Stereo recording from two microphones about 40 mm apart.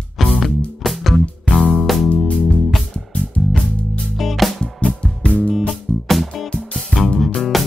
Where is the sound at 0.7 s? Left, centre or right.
Centre.